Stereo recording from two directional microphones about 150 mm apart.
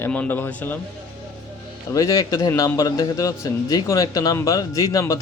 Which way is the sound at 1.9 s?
20° left (ahead or behind).